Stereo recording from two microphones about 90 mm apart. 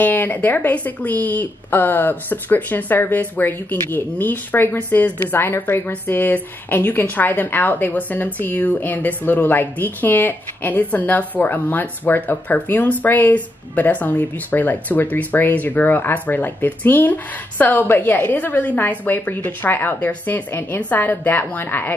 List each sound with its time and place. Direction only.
0.0 s a woman's voice: 20° left (ahead or behind)